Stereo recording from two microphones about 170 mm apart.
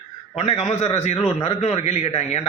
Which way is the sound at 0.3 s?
40° left (ahead or behind).